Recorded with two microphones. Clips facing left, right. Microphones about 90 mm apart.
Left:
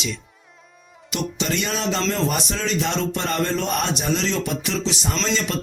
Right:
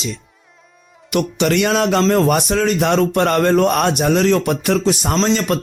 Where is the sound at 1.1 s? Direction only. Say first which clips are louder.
Right 9 dB; 60° right (ahead or behind).